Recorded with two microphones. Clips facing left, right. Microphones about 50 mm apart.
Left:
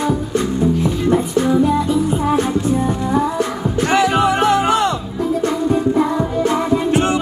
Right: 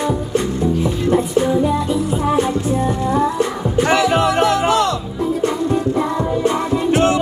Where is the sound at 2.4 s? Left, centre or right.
Centre.